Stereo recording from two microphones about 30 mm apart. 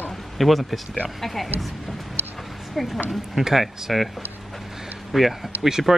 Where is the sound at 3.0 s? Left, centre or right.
Centre.